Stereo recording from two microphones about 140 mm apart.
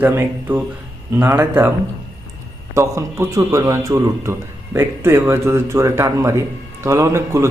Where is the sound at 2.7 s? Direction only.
20° right (ahead or behind).